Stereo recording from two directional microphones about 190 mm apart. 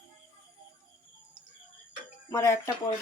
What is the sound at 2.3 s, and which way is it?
Speech, 15° left (ahead or behind).